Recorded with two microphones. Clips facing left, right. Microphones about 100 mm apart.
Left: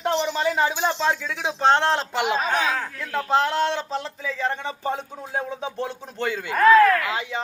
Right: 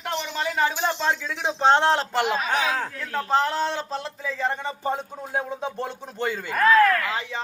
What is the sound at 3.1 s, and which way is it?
Speech, 5° left (ahead or behind).